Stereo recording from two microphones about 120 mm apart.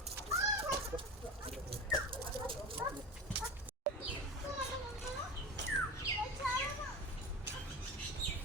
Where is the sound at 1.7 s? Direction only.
45° right (ahead or behind).